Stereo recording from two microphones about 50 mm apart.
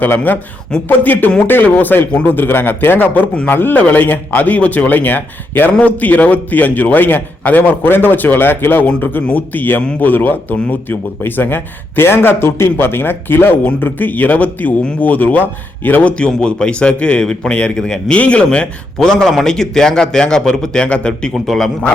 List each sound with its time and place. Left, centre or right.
0.9 s a man's voice: left
16.0 s a man's voice: centre
18.9 s a man's voice: centre
21.3 s a man's voice: centre